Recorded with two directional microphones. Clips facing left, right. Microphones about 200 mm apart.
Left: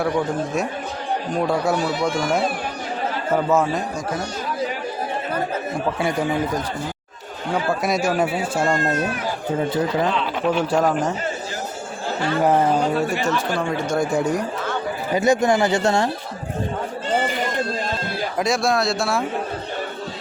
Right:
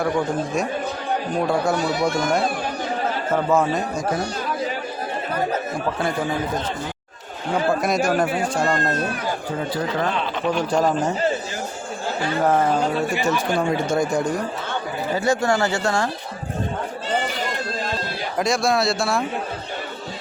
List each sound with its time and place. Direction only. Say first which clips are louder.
1.4 s speech: left 1 dB; centre (ahead or behind)
3.3 s speech: left 1 dB; centre (ahead or behind)
6.0 s speech: left 2 dB; 10° left (ahead or behind)
7.8 s speech: even; centre (ahead or behind)
10.4 s speech: left 1 dB; 5° left (ahead or behind)
12.4 s speech: left 1 dB; 15° left (ahead or behind)
13.1 s speech: even; 5° right (ahead or behind); by 16.0 s 20° left (ahead or behind)
18.3 s speech: even; centre (ahead or behind)